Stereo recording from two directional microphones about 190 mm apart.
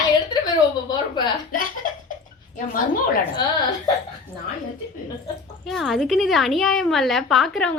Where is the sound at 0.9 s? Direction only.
25° left (ahead or behind).